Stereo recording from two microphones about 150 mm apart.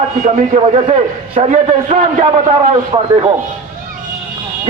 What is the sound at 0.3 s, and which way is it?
A man's voice, 55° right (ahead or behind).